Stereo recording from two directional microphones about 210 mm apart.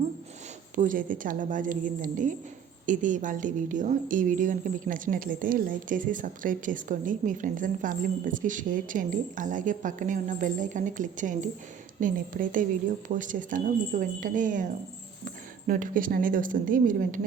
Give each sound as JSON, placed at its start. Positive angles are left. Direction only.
{"t": 0.8, "sound": "speech", "side_deg": -40}